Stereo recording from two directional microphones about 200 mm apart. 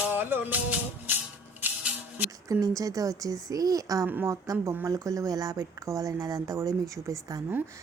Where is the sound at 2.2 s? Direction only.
20° right (ahead or behind).